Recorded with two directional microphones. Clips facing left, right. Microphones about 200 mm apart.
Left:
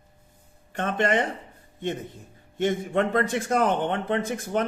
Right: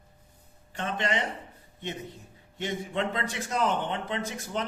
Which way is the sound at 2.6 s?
50° left (ahead or behind).